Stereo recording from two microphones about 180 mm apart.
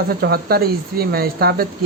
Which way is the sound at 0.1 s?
60° right (ahead or behind).